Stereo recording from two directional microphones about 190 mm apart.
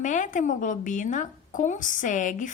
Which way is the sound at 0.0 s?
40° left (ahead or behind).